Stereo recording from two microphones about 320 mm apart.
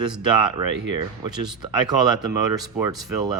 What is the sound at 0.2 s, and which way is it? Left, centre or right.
Speech, centre.